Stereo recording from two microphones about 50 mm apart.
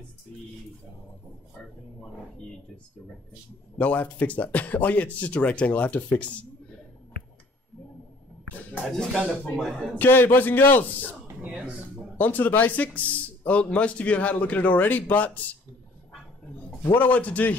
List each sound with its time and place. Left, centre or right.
3.7 s speech: left
8.8 s speech: centre
9.9 s a man's voice: left
11.4 s speech: right
12.2 s speech: left
16.9 s speech: left